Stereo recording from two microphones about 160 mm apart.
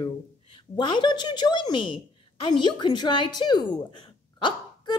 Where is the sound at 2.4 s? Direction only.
30° left (ahead or behind).